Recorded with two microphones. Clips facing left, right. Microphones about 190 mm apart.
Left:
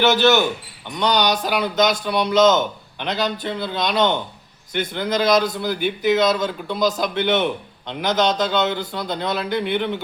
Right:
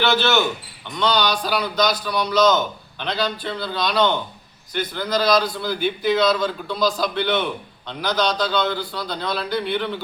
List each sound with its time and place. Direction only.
0.0 s a man's voice: 15° left (ahead or behind)